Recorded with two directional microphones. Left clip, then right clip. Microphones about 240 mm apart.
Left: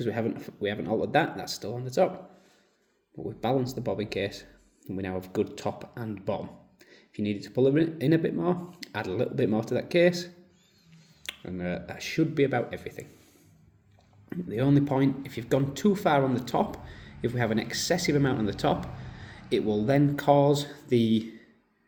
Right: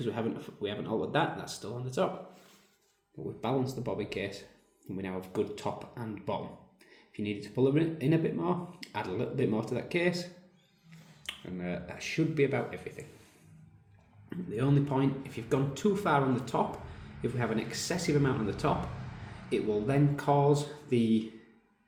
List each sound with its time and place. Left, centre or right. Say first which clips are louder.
0.0 s speech: left 4 dB; left
3.4 s speech: left 5 dB; left
14.3 s speech: left 5 dB; left